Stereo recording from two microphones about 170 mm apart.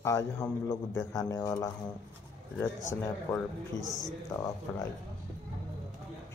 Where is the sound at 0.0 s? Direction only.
15° left (ahead or behind).